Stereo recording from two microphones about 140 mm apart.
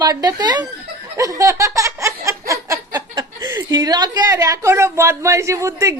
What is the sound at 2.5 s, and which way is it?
A woman's voice, 25° right (ahead or behind).